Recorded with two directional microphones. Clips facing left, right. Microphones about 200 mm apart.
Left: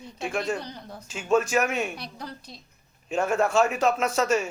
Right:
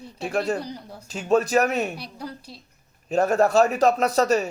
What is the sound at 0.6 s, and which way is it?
Speech, 10° right (ahead or behind).